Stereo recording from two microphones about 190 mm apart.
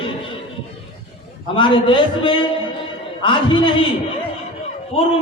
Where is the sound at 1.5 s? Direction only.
25° left (ahead or behind).